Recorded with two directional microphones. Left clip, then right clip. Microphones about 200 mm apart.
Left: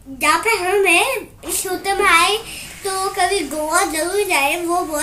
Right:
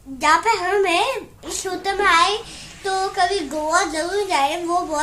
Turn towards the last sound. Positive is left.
turn(degrees=-15)  # may be behind; listen again after turning